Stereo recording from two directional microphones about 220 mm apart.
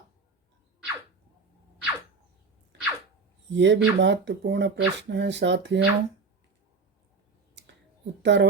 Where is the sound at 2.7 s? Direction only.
55° right (ahead or behind).